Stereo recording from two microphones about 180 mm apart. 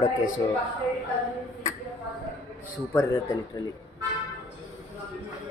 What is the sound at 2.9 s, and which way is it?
Speech, 20° left (ahead or behind).